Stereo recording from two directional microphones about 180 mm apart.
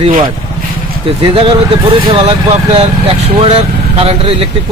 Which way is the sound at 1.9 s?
30° right (ahead or behind).